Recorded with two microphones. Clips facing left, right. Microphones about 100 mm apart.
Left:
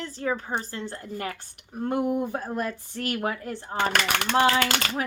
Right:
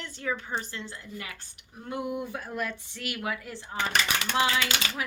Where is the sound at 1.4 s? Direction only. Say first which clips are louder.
Left 10 dB; 50° left (ahead or behind).